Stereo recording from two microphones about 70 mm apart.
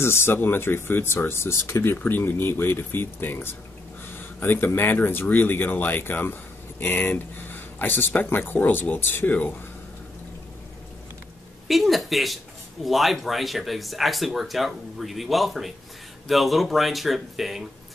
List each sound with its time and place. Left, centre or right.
0.0 s speech: left
11.6 s a woman's voice: centre